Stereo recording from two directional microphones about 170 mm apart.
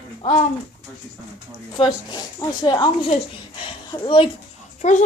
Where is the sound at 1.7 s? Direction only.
25° left (ahead or behind).